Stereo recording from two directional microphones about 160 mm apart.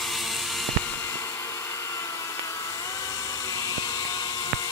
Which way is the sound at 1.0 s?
15° left (ahead or behind).